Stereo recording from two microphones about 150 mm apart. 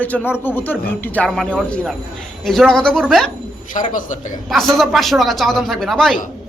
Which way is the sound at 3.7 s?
60° left (ahead or behind).